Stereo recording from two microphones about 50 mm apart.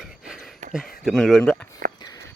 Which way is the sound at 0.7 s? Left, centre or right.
Centre.